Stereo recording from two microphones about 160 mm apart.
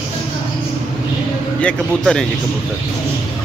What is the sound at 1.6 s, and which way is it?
Speech, 5° left (ahead or behind).